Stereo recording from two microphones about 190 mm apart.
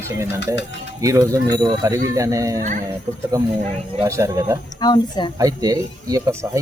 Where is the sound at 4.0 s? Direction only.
15° right (ahead or behind).